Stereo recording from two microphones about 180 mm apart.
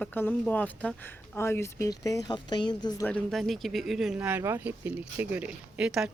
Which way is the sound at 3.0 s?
5° left (ahead or behind).